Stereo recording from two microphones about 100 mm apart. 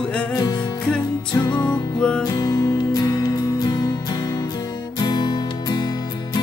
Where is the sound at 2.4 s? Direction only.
40° left (ahead or behind).